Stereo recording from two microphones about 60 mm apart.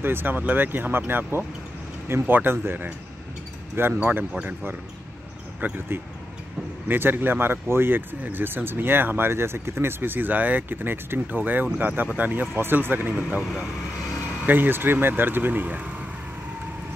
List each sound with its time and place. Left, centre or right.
0.0 s speech: right
4.0 s speech: right
5.6 s speech: right
6.9 s speech: right
13.4 s speech: centre
14.4 s speech: right